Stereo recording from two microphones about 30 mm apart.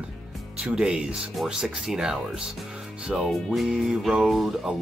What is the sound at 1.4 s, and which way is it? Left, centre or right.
Speech, centre.